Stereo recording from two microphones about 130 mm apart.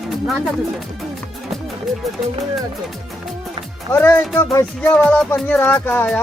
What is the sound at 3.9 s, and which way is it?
Speech, 15° left (ahead or behind).